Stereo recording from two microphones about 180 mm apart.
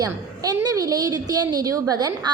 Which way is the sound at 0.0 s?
20° right (ahead or behind).